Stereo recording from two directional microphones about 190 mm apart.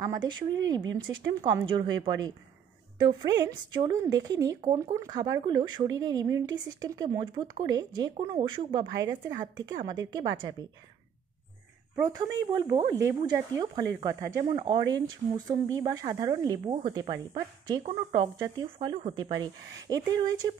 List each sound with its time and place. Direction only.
0.0 s speech: 20° right (ahead or behind)
11.9 s speech: 20° right (ahead or behind)